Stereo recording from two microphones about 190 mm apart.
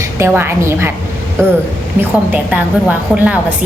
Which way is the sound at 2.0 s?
10° right (ahead or behind).